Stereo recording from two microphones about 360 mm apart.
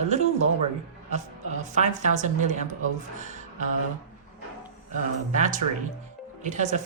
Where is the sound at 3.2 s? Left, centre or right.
Centre.